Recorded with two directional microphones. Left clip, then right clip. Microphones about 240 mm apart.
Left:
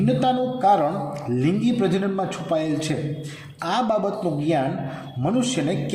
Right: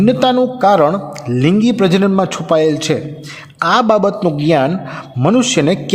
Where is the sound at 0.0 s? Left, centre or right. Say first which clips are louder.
Right 9 dB; right.